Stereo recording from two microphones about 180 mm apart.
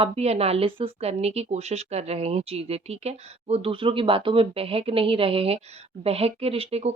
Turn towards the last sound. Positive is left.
turn(degrees=-35)  # may be behind; listen again after turning